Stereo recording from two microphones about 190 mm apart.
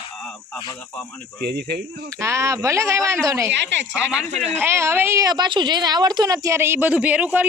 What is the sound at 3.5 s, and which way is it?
Speech, 70° right (ahead or behind).